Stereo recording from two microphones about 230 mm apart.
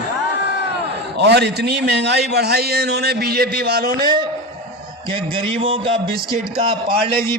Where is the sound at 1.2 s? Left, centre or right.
Right.